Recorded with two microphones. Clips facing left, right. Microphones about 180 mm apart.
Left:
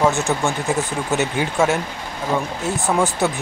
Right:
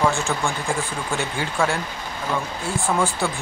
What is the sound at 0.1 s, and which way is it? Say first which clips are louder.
Speech: left 4 dB; 20° left (ahead or behind).